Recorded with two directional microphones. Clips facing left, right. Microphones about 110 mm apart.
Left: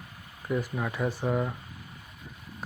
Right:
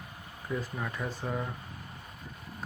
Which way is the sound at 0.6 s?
15° left (ahead or behind).